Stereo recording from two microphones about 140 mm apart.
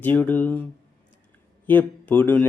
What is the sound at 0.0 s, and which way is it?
Speech, 15° left (ahead or behind).